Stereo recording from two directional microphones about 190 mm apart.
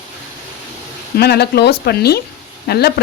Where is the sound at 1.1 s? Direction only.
55° left (ahead or behind).